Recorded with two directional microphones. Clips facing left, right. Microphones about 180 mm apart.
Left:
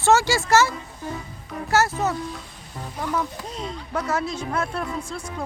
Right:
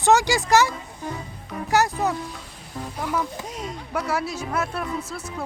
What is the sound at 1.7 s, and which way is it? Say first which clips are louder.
Speech: even; 15° right (ahead or behind).